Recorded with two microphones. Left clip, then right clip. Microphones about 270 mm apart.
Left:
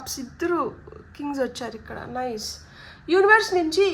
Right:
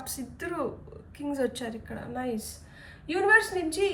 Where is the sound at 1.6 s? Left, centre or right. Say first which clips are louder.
Left 4 dB; centre.